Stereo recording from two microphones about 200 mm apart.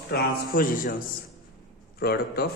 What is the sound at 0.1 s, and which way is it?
A man's voice, 50° left (ahead or behind).